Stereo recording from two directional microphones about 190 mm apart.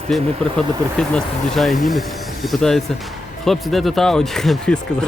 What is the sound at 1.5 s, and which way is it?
Speech, centre (ahead or behind).